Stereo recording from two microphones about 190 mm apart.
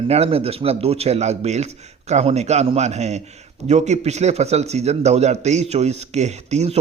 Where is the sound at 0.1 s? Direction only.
30° right (ahead or behind).